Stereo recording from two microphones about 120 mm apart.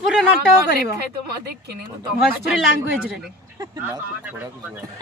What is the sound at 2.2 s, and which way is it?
Speech, centre (ahead or behind).